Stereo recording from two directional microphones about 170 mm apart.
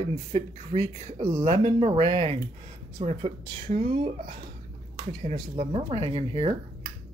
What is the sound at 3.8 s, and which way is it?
Speech, 30° right (ahead or behind).